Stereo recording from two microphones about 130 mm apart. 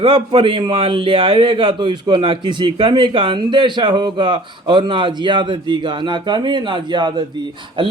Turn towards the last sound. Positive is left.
turn(degrees=-40)  # may be behind; listen again after turning